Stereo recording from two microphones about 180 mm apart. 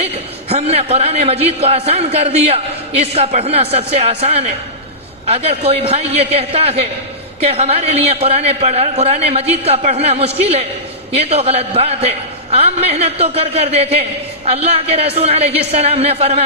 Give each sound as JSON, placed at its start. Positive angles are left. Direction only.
{"t": 0.0, "sound": "a man's voice", "side_deg": -35}